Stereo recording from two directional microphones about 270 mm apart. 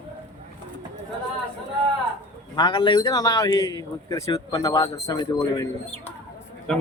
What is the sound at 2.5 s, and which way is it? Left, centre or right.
A man's voice, centre.